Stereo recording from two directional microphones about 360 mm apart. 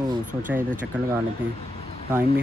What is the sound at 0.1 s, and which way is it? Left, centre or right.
Speech, right.